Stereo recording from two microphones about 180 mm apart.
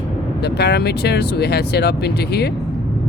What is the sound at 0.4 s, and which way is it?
Speech, 65° left (ahead or behind).